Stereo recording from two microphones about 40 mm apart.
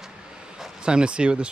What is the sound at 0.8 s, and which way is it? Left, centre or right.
Speech, right.